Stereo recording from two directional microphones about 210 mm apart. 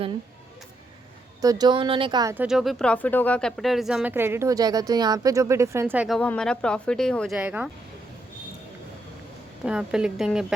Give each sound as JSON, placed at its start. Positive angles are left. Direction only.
{"t": 1.4, "sound": "speech", "side_deg": -15}
{"t": 2.3, "sound": "speech", "side_deg": -5}
{"t": 6.1, "sound": "speech", "side_deg": 5}
{"t": 9.6, "sound": "speech", "side_deg": -5}